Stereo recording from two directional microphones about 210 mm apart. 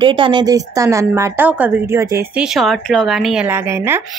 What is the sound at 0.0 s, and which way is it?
Speech, 20° right (ahead or behind).